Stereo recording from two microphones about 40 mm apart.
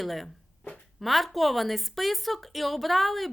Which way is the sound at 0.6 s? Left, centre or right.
Left.